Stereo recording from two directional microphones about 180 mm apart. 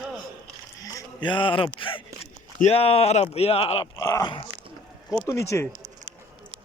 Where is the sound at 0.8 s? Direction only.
20° left (ahead or behind).